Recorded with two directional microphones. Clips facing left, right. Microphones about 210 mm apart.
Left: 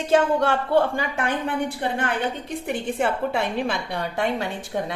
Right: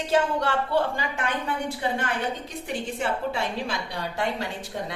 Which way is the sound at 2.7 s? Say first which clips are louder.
Left 4 dB; 55° left (ahead or behind).